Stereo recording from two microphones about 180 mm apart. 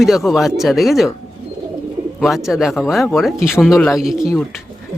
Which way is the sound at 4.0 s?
5° right (ahead or behind).